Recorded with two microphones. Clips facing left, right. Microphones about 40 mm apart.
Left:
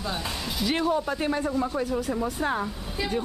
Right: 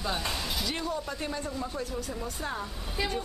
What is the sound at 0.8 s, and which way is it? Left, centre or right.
Speech, left.